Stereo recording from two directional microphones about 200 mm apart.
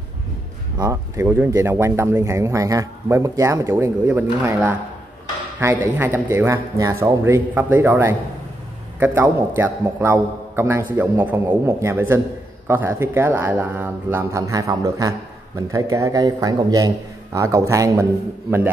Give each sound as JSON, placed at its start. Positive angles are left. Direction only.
{"t": 0.7, "sound": "speech", "side_deg": -15}